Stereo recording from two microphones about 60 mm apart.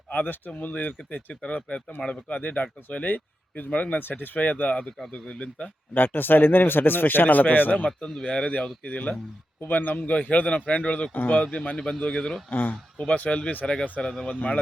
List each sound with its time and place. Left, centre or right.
0.1 s speech: left
5.9 s speech: left
7.9 s speech: centre
11.1 s speech: left
11.4 s speech: centre
11.8 s speech: centre
12.5 s speech: left
13.0 s speech: left
14.0 s speech: centre
14.3 s speech: left